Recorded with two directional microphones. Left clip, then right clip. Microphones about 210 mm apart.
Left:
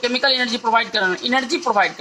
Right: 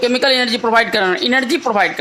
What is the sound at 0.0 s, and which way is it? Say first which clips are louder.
Speech: right 4 dB; 40° right (ahead or behind).